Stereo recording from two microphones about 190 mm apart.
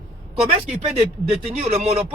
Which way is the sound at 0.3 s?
35° right (ahead or behind).